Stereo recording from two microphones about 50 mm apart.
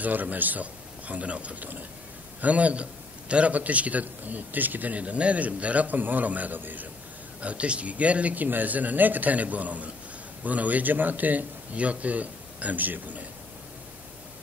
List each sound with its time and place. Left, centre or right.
0.0 s a man's voice: right
7.4 s a man's voice: right